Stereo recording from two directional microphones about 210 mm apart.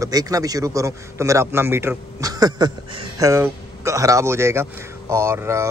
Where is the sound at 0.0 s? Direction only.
15° right (ahead or behind).